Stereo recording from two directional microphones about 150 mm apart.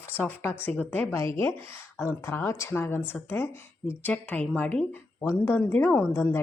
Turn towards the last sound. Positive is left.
turn(degrees=15)  # may be behind; listen again after turning